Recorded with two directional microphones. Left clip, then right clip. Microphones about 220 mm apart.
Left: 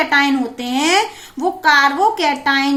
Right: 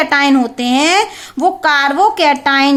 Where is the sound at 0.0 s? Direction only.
45° right (ahead or behind).